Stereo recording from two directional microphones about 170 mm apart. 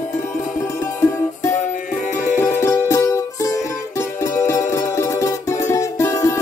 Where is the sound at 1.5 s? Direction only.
45° left (ahead or behind).